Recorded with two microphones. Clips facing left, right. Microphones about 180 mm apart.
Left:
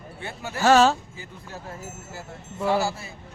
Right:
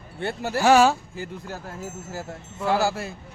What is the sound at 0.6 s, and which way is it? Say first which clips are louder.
Speech: even; 10° right (ahead or behind).